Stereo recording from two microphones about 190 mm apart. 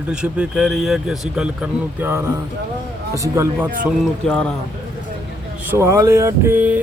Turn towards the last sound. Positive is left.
turn(degrees=-10)  # may be behind; listen again after turning